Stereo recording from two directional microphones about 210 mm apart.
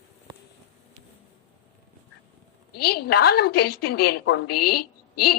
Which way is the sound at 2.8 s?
50° left (ahead or behind).